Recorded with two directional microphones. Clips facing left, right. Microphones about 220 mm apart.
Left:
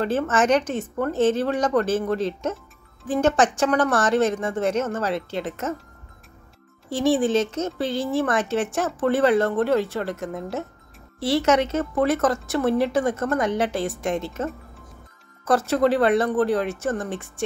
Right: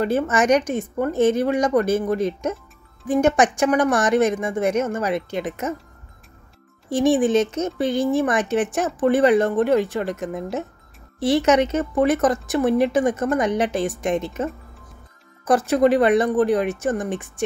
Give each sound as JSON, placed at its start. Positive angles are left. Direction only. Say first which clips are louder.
{"t": 0.0, "sound": "speech", "louder": "right 2 dB", "side_deg": -10}
{"t": 6.9, "sound": "speech", "louder": "right 3 dB", "side_deg": -15}